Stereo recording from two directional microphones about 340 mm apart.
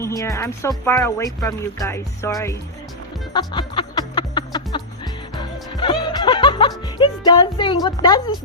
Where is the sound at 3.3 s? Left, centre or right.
Centre.